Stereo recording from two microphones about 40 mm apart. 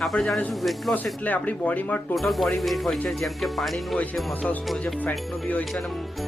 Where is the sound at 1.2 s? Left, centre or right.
Left.